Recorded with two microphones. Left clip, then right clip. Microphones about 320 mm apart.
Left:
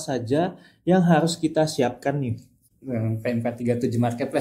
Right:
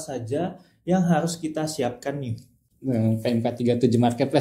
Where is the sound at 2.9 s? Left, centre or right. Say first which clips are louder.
Right 3 dB; right.